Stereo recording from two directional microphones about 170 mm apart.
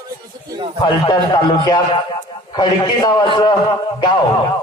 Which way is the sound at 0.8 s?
25° left (ahead or behind).